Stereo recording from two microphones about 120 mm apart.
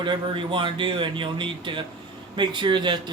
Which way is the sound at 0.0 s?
45° right (ahead or behind).